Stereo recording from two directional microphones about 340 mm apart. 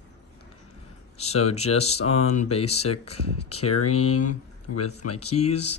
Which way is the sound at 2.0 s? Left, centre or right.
Left.